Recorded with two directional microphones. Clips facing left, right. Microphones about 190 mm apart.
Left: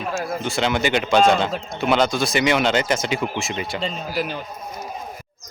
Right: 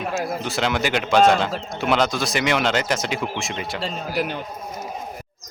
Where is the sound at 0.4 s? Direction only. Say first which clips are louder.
Left 4 dB; centre (ahead or behind).